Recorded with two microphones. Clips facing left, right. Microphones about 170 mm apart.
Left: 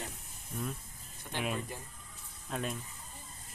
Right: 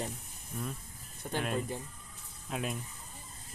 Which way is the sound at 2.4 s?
5° right (ahead or behind).